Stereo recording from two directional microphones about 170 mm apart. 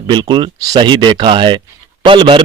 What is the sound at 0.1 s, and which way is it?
A man's voice, 25° right (ahead or behind).